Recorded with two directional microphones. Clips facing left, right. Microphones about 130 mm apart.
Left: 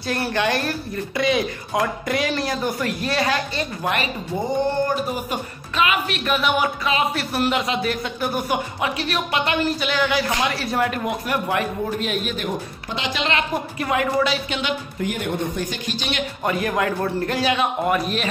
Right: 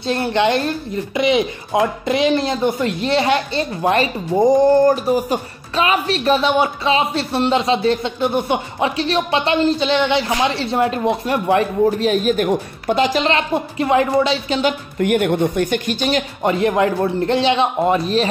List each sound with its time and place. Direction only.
0.0 s speech: 25° right (ahead or behind)
15.0 s a woman's voice: 60° right (ahead or behind); by 16.3 s 45° right (ahead or behind)
16.4 s speech: 25° right (ahead or behind)